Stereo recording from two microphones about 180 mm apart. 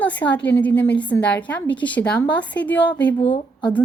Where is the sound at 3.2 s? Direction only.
30° left (ahead or behind).